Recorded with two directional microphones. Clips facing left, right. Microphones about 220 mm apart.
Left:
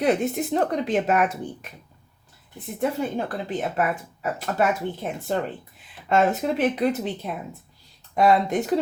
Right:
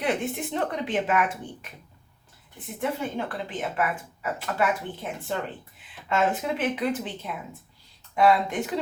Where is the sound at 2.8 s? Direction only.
40° left (ahead or behind).